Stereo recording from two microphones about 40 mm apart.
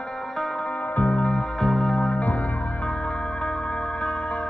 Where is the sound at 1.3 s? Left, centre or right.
Left.